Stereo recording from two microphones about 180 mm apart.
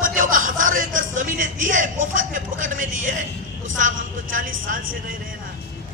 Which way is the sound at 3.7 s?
45° right (ahead or behind).